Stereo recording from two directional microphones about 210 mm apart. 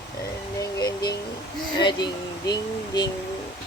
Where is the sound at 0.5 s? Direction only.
20° left (ahead or behind).